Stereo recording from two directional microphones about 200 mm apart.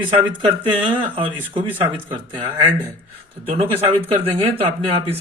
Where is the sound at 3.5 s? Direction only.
30° right (ahead or behind).